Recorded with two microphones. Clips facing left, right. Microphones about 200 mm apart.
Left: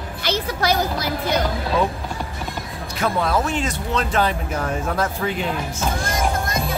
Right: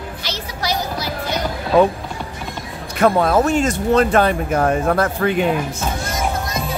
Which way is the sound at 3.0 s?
50° right (ahead or behind).